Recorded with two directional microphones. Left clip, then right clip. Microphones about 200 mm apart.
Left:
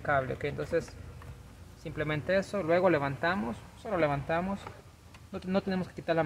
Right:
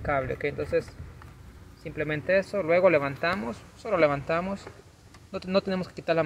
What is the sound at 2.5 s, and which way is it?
Speech, 10° right (ahead or behind).